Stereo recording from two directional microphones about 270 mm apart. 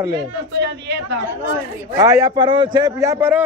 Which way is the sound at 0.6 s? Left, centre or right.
Right.